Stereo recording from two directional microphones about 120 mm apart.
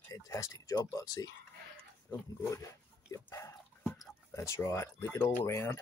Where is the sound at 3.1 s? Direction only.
25° left (ahead or behind).